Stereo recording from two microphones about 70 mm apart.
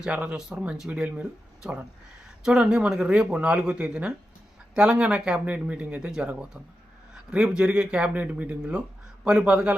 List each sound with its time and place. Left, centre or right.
0.0 s speech: centre
2.4 s speech: centre